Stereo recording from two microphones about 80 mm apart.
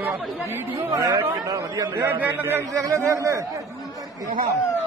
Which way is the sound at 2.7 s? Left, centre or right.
Right.